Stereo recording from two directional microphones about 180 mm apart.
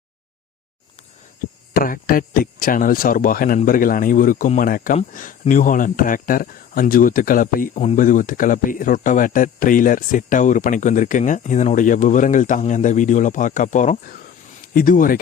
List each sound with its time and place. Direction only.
1.7 s speech: 50° left (ahead or behind)